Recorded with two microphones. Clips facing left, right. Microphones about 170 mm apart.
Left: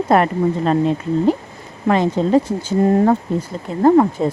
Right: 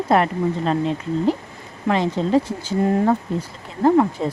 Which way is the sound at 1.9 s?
45° left (ahead or behind).